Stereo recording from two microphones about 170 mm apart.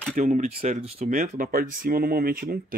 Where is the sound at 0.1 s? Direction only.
45° right (ahead or behind).